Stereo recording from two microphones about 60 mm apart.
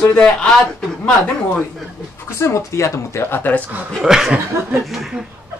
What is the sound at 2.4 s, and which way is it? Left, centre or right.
Speech, left.